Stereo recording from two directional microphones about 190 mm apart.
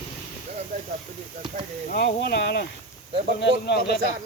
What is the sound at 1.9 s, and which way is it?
Speech, 55° left (ahead or behind).